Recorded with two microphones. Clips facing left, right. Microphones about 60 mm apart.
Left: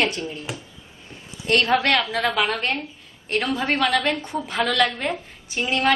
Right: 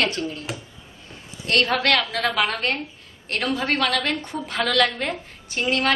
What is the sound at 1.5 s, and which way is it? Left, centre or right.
A woman's voice, centre.